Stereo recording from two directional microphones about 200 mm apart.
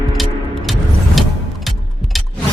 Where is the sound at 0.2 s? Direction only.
Centre (ahead or behind).